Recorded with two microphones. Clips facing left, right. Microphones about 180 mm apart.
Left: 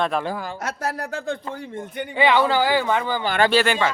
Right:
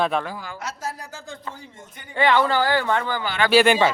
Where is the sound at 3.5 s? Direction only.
15° right (ahead or behind).